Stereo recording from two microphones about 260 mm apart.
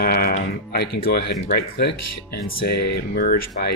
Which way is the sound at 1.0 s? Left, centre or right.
Left.